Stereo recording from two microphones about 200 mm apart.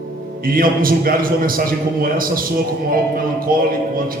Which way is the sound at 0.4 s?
45° right (ahead or behind).